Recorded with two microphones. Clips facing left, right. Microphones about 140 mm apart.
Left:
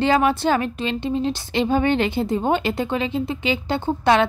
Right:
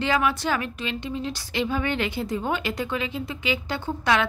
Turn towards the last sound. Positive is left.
turn(degrees=30)  # may be behind; listen again after turning